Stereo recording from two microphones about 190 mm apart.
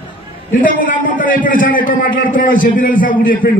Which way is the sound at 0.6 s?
45° left (ahead or behind).